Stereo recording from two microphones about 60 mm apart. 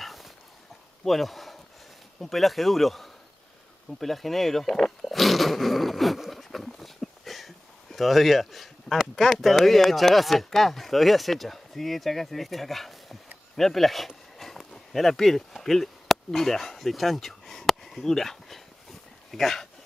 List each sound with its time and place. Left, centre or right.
0.0 s dog: centre
1.0 s speech: centre
13.6 s a sound: centre